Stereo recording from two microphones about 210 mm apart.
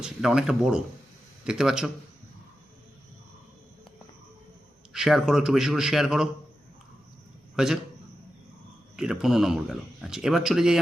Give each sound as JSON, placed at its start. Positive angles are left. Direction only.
{"t": 0.0, "sound": "speech", "side_deg": -5}
{"t": 4.9, "sound": "speech", "side_deg": 0}
{"t": 7.5, "sound": "a man's voice", "side_deg": 0}
{"t": 9.0, "sound": "speech", "side_deg": -5}